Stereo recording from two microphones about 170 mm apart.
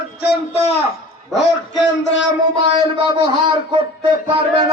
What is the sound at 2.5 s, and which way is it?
A man's voice, 30° right (ahead or behind).